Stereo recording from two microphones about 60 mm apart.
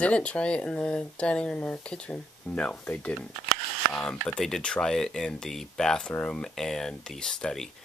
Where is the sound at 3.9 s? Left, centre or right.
Centre.